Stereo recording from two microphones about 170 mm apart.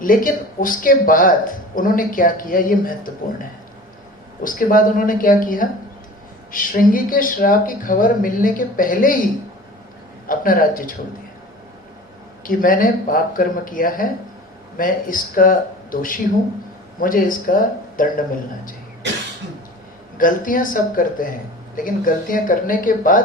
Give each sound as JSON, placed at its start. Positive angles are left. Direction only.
{"t": 0.0, "sound": "speech", "side_deg": 55}
{"t": 4.4, "sound": "speech", "side_deg": 55}
{"t": 10.2, "sound": "speech", "side_deg": 55}
{"t": 12.5, "sound": "speech", "side_deg": 55}
{"t": 20.1, "sound": "speech", "side_deg": 55}